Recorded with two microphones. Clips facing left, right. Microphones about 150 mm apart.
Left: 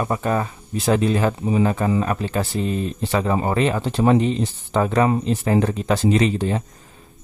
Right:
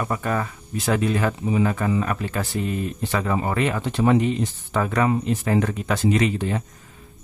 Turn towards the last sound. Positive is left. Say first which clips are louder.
# left 2 dB
turn(degrees=30)  # may be behind; listen again after turning